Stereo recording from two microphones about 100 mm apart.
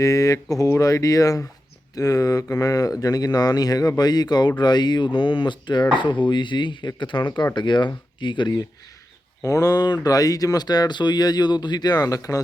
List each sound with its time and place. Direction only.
0.0 s speech: 35° left (ahead or behind); by 8.5 s 50° left (ahead or behind)
9.4 s speech: 35° left (ahead or behind)